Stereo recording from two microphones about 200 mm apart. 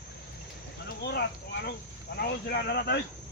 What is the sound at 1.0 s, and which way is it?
Speech, 55° left (ahead or behind).